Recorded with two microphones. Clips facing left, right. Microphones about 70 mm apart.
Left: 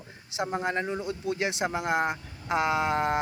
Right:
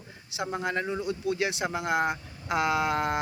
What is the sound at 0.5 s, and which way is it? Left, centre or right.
Speech, left.